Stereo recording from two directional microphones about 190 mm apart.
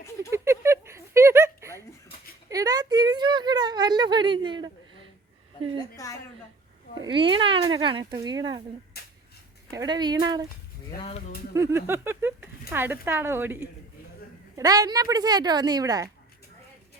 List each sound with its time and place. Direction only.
0.3 s a sound: 15° right (ahead or behind)
5.7 s a woman's voice: 15° left (ahead or behind)
7.0 s speech: 25° right (ahead or behind)
9.7 s speech: 20° right (ahead or behind)
11.5 s speech: 15° right (ahead or behind)